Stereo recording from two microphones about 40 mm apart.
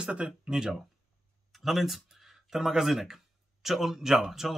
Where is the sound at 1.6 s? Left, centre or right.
Centre.